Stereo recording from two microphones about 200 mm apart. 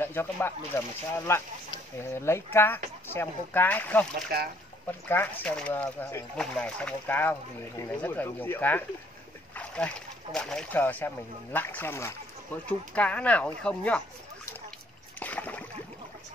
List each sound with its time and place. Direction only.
0.0 s speech: 10° left (ahead or behind)
4.3 s speech: 50° right (ahead or behind)
5.0 s speech: 10° left (ahead or behind)
15.1 s a sound: 10° left (ahead or behind)